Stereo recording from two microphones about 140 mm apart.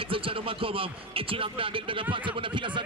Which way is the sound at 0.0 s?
40° right (ahead or behind).